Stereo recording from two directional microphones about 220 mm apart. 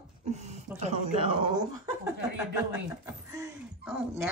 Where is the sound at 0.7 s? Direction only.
30° right (ahead or behind).